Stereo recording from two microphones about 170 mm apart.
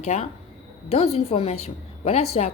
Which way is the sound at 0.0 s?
40° left (ahead or behind).